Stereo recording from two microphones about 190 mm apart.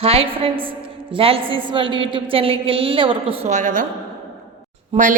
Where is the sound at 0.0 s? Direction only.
30° right (ahead or behind).